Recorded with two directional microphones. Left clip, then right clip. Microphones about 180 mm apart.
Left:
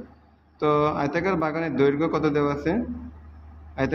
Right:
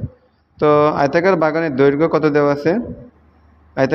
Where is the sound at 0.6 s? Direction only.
35° right (ahead or behind).